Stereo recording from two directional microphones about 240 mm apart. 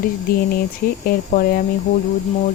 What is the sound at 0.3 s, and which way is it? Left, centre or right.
Speech, left.